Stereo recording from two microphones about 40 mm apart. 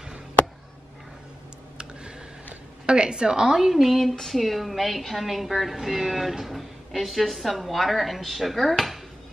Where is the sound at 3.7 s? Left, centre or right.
Centre.